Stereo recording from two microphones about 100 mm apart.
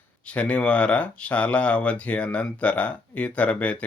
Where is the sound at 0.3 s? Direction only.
10° left (ahead or behind).